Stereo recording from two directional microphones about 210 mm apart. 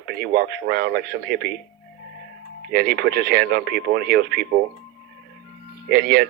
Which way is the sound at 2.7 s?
50° right (ahead or behind).